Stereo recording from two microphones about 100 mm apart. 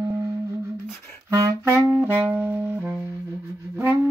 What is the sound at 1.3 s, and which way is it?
Music, 35° right (ahead or behind).